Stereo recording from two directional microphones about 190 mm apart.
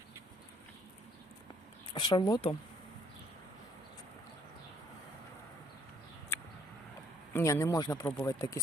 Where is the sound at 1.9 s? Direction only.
25° left (ahead or behind).